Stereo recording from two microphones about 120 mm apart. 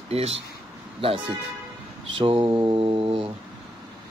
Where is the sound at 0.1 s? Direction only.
55° right (ahead or behind).